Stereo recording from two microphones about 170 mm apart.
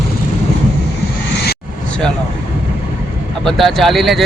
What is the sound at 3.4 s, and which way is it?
Speech, centre (ahead or behind).